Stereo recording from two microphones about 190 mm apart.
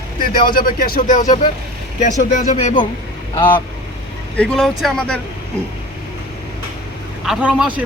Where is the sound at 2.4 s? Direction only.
35° left (ahead or behind).